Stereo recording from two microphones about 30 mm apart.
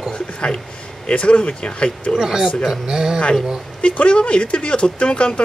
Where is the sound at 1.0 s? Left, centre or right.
Left.